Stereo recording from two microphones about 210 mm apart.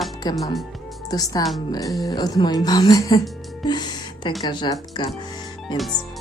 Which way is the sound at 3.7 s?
20° left (ahead or behind).